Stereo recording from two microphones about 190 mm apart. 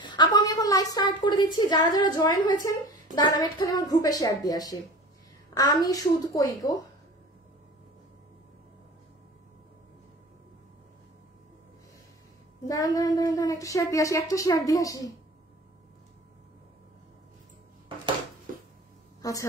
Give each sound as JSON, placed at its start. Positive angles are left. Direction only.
{"t": 0.0, "sound": "a woman's voice", "side_deg": 25}
{"t": 12.6, "sound": "a woman's voice", "side_deg": 20}
{"t": 18.5, "sound": "a sound", "side_deg": -45}
{"t": 19.2, "sound": "a woman's voice", "side_deg": 20}